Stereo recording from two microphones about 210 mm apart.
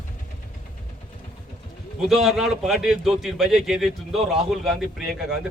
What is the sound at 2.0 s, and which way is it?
A man's voice, centre (ahead or behind).